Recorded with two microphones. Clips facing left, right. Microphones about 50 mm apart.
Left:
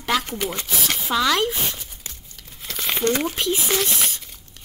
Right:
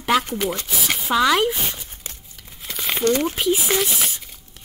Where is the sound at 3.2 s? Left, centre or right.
Centre.